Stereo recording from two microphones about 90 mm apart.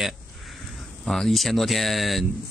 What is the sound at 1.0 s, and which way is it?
Speech, 5° left (ahead or behind).